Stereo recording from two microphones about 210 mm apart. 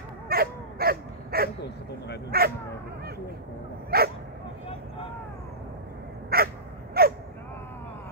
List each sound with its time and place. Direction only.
0.3 s a sound: 45° right (ahead or behind)
2.3 s speech: 45° right (ahead or behind)
3.9 s dog: 45° right (ahead or behind)
6.3 s crow: 45° right (ahead or behind)